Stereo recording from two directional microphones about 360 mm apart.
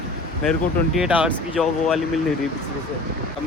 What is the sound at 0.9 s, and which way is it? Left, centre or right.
Speech, centre.